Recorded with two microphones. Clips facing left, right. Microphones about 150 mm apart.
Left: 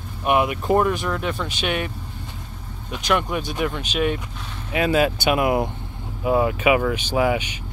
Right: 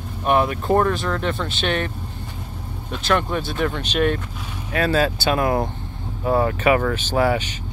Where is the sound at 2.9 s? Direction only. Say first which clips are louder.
Right 1 dB; 10° left (ahead or behind).